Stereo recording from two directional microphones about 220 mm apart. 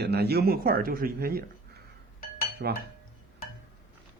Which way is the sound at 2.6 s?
50° right (ahead or behind).